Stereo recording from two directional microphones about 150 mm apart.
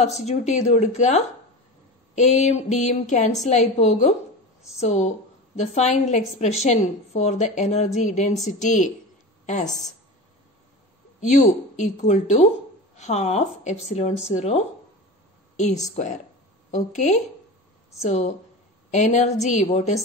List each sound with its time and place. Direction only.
0.2 s a woman's voice: 50° left (ahead or behind)
9.7 s a woman's voice: centre (ahead or behind)
11.1 s a woman's voice: 55° left (ahead or behind)